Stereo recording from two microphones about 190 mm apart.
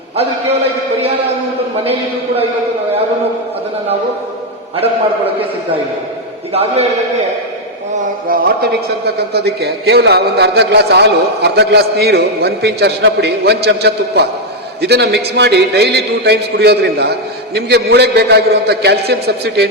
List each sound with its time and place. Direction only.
1.8 s a man's voice: 30° right (ahead or behind)
6.5 s a man's voice: 30° right (ahead or behind)
8.3 s a man's voice: 55° right (ahead or behind)